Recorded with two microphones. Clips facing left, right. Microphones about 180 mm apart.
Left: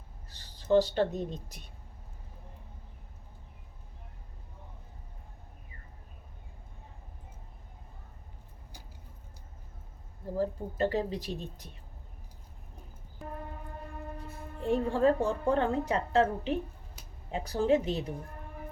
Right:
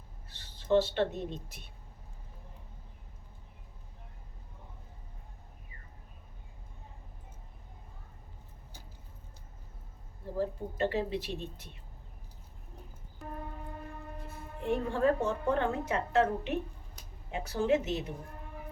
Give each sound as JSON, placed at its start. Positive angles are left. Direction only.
{"t": 0.3, "sound": "speech", "side_deg": 35}
{"t": 10.3, "sound": "a woman's voice", "side_deg": 40}
{"t": 14.6, "sound": "a woman's voice", "side_deg": 35}